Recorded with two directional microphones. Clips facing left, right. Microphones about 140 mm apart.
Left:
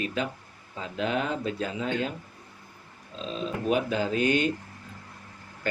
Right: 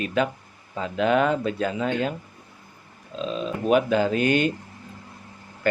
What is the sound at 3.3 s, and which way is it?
Speech, 65° right (ahead or behind).